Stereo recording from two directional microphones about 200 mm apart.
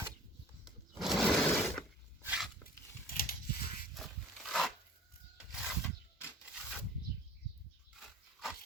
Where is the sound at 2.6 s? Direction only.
45° left (ahead or behind).